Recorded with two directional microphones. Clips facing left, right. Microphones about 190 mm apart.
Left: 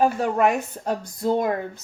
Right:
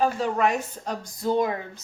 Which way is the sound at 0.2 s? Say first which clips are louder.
Left 3 dB; 50° left (ahead or behind).